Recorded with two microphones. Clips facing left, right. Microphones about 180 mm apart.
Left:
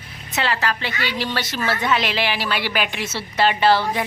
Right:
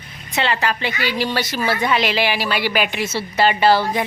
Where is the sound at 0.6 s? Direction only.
15° right (ahead or behind).